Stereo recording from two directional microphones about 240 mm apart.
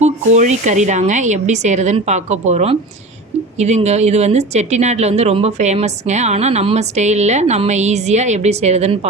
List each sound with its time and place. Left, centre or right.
0.0 s speech: right